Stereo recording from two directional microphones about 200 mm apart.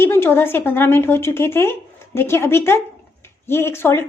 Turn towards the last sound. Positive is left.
turn(degrees=10)  # may be behind; listen again after turning